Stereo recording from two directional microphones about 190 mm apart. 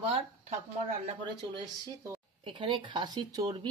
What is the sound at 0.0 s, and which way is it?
Speech, 30° right (ahead or behind).